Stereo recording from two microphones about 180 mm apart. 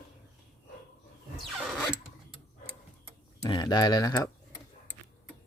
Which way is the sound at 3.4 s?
25° left (ahead or behind).